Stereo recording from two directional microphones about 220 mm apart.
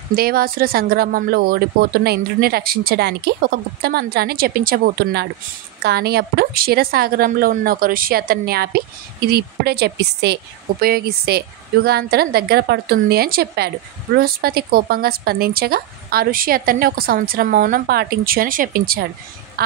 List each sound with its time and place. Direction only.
0.1 s a woman's voice: 45° right (ahead or behind)